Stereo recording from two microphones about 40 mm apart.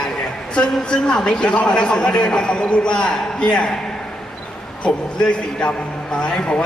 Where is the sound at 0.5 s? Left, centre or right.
Centre.